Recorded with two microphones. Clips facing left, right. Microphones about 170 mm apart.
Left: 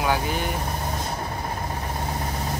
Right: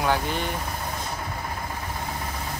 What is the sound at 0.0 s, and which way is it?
Speech, 5° left (ahead or behind).